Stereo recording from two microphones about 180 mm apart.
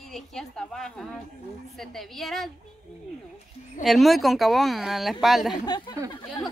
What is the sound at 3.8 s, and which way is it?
A woman's voice, centre (ahead or behind).